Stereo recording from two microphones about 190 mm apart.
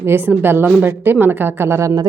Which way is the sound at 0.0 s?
10° right (ahead or behind).